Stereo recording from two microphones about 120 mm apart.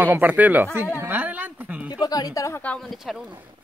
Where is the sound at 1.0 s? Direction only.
15° right (ahead or behind).